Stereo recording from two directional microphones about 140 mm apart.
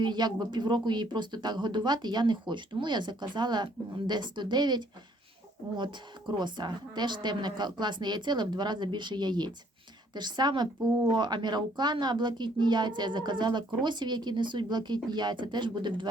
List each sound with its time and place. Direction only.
0.0 s speech: 30° right (ahead or behind)